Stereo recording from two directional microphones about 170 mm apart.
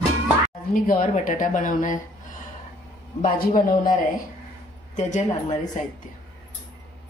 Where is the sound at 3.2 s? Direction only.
55° left (ahead or behind).